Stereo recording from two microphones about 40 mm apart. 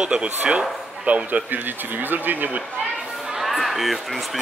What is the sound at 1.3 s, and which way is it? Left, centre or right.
Speech, right.